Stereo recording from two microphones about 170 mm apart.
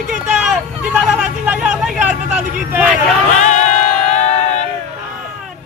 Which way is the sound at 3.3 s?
45° left (ahead or behind).